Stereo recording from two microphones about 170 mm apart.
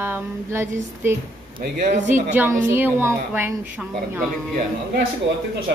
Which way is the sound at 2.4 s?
15° right (ahead or behind).